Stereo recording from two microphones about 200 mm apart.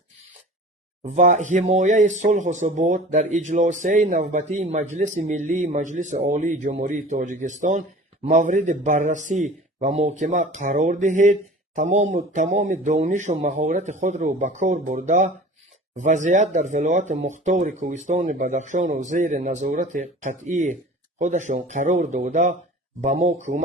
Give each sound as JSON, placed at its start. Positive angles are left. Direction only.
{"t": 1.0, "sound": "speech", "side_deg": -35}